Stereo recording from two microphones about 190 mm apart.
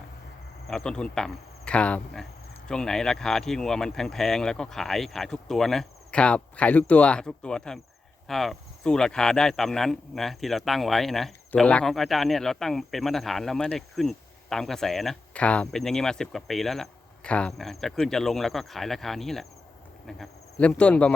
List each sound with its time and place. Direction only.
0.7 s speech: 5° left (ahead or behind)